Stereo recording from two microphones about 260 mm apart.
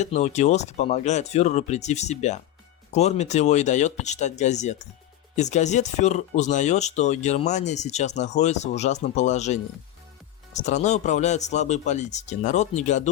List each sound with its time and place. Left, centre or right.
0.0 s speech: left